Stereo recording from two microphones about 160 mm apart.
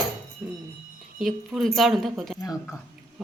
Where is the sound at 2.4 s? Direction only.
20° left (ahead or behind).